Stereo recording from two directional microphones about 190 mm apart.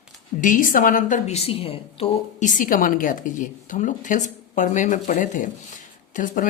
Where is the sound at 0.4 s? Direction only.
45° left (ahead or behind).